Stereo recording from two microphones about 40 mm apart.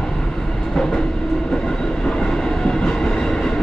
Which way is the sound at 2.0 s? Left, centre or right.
Centre.